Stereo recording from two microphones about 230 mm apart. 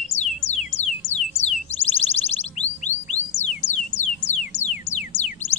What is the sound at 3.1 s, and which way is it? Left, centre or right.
Music, left.